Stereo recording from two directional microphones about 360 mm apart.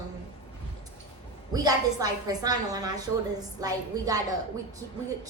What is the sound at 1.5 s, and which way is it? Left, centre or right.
A woman's voice, centre.